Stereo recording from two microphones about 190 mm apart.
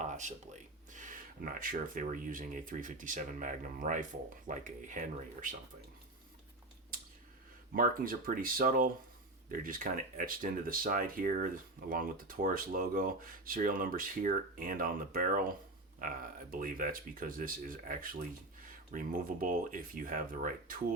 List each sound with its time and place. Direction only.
0.0 s a sound: 40° right (ahead or behind)
0.9 s speech: 45° right (ahead or behind)
7.7 s speech: 45° right (ahead or behind)